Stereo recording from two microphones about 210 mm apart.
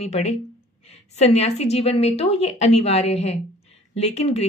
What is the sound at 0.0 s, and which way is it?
A woman's voice, 30° left (ahead or behind).